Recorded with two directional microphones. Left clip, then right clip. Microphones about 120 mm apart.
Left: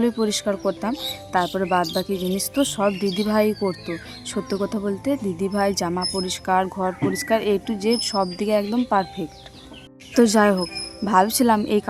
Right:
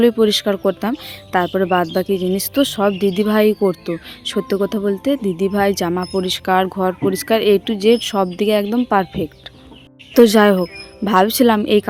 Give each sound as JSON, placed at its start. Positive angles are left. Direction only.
{"t": 0.0, "sound": "speech", "side_deg": -35}
{"t": 2.0, "sound": "speech", "side_deg": -30}